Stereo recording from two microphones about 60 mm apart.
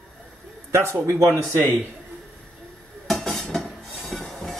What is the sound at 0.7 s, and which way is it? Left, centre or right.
Speech, right.